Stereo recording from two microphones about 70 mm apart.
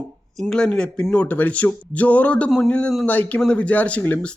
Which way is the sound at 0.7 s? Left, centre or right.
Centre.